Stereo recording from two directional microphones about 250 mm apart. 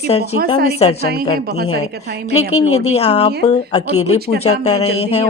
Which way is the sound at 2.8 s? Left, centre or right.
Left.